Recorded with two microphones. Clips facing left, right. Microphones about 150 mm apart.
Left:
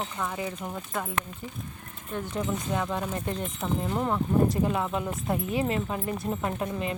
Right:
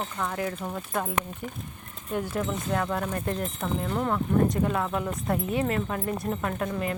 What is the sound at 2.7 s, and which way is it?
Speech, 5° left (ahead or behind).